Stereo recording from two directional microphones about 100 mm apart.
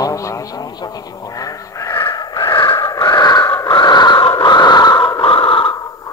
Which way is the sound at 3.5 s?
35° left (ahead or behind).